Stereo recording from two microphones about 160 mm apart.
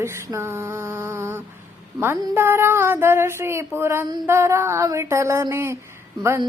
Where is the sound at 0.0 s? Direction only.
15° right (ahead or behind).